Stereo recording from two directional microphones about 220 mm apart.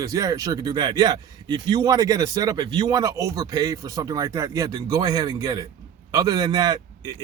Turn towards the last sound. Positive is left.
turn(degrees=-20)  # may be behind; listen again after turning